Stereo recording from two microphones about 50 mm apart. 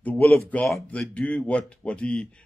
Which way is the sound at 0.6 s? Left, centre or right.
Centre.